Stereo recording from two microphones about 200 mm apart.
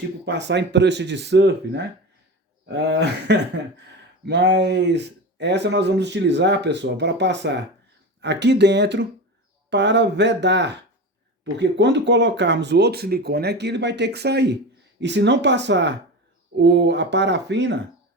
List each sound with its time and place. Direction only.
0.3 s speech: 60° right (ahead or behind)